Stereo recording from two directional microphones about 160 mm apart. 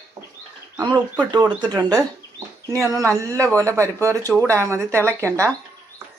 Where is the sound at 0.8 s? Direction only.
25° right (ahead or behind).